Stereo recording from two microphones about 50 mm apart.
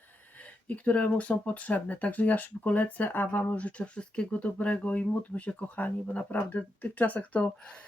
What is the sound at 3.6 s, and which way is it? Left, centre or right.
Speech, left.